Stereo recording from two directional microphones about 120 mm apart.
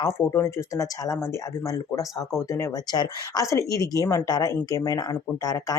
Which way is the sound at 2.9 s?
35° left (ahead or behind).